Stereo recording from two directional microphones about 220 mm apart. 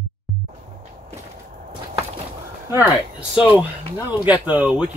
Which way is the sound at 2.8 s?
5° right (ahead or behind).